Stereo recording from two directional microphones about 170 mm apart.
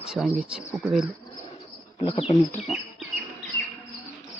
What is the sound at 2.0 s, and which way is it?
Speech, 30° left (ahead or behind).